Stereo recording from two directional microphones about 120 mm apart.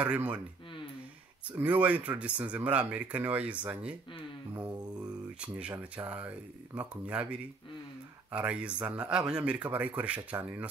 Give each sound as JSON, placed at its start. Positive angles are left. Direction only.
{"t": 0.0, "sound": "speech", "side_deg": -10}
{"t": 1.6, "sound": "speech", "side_deg": -10}
{"t": 5.4, "sound": "speech", "side_deg": -10}